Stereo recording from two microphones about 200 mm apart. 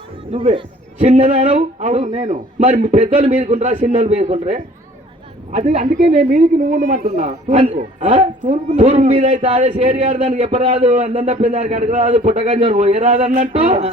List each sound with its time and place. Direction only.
0.3 s a man's voice: 25° right (ahead or behind)
11.2 s a man's voice: 40° right (ahead or behind)